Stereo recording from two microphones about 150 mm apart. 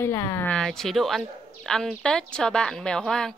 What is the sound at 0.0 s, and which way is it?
Speech, 20° left (ahead or behind).